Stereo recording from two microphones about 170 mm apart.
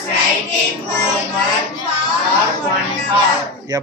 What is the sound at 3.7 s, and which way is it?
Speech, 20° right (ahead or behind).